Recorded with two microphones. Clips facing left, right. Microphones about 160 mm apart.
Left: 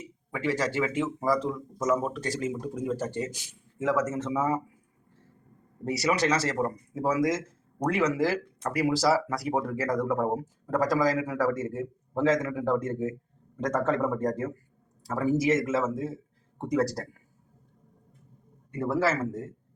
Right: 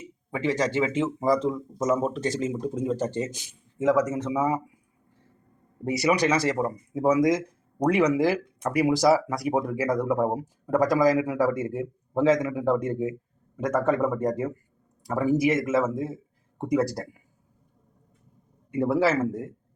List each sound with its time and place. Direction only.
0.3 s speech: 20° right (ahead or behind)
5.8 s speech: 15° right (ahead or behind)
18.7 s speech: 15° right (ahead or behind)